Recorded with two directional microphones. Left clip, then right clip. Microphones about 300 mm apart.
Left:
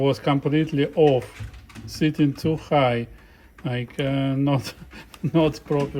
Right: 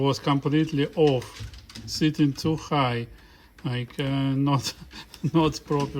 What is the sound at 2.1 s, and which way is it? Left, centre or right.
Speech, centre.